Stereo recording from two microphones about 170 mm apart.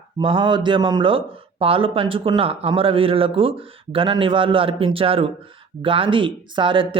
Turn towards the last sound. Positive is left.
turn(degrees=-30)  # may be behind; listen again after turning